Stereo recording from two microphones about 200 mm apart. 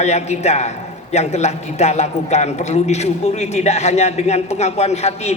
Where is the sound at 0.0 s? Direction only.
35° left (ahead or behind).